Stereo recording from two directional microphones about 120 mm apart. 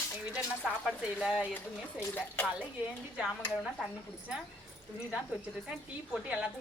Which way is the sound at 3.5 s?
5° right (ahead or behind).